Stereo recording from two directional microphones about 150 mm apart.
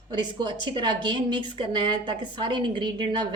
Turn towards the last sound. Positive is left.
turn(degrees=-30)  # may be behind; listen again after turning